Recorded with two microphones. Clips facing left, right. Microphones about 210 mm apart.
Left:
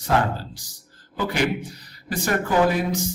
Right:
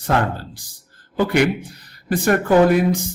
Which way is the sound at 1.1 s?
55° right (ahead or behind).